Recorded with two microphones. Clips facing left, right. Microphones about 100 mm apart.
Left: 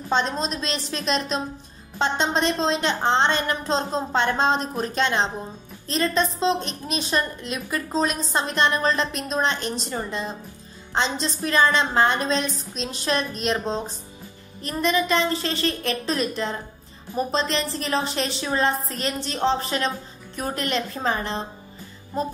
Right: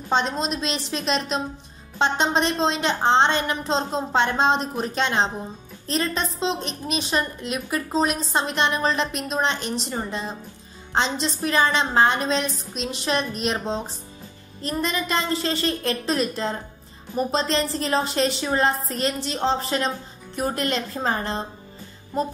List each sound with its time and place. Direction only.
0.1 s a woman's voice: 15° right (ahead or behind); by 21.4 s 35° right (ahead or behind)